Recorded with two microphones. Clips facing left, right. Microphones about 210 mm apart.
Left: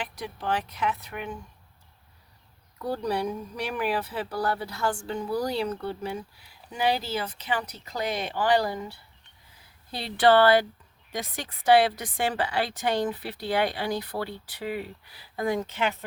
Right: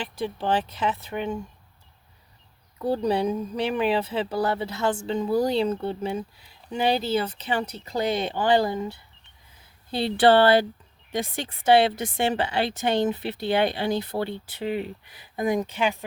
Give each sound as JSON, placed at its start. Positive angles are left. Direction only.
{"t": 0.0, "sound": "speech", "side_deg": -30}
{"t": 2.7, "sound": "speech", "side_deg": -25}